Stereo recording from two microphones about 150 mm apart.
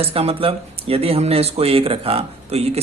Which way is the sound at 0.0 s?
40° right (ahead or behind).